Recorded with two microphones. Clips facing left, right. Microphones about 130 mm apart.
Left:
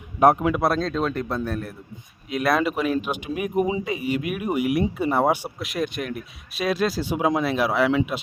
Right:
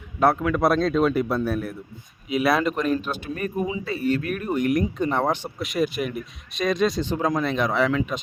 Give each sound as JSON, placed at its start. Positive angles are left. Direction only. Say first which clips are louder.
{"t": 0.2, "sound": "a man's voice", "louder": "left 3 dB", "side_deg": 20}
{"t": 0.5, "sound": "speech", "louder": "right 3 dB", "side_deg": 0}